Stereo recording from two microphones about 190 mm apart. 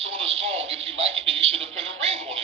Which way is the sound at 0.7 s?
80° right.